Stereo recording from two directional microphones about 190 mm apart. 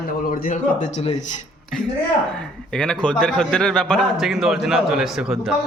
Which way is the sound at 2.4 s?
5° left (ahead or behind).